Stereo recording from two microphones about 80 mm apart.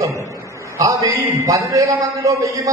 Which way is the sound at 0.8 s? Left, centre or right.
Right.